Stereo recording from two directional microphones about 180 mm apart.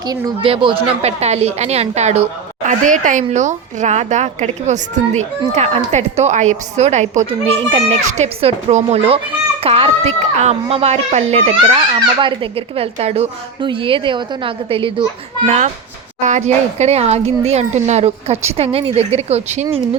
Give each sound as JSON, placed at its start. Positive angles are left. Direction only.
{"t": 0.0, "sound": "a woman's voice", "side_deg": -20}
{"t": 15.4, "sound": "a woman's voice", "side_deg": -40}